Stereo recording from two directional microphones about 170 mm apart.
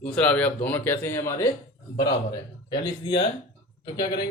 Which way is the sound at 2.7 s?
30° left (ahead or behind).